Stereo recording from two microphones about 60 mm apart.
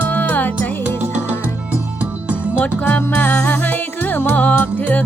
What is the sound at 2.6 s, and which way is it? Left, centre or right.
Music, left.